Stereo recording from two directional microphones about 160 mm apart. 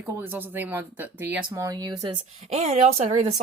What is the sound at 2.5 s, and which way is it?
Speech, 40° right (ahead or behind).